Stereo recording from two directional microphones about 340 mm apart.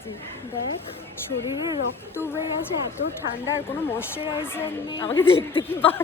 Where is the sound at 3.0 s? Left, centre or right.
Left.